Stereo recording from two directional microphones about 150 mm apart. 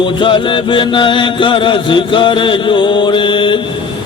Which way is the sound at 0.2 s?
35° left (ahead or behind).